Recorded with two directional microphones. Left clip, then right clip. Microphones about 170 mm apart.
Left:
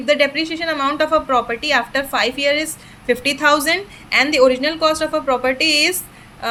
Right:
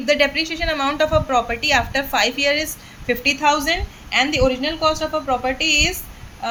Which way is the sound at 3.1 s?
30° left (ahead or behind).